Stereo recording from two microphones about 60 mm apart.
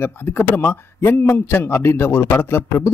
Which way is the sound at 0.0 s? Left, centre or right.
Left.